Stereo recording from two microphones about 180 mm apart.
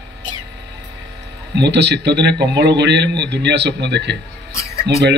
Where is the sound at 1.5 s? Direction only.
70° right (ahead or behind).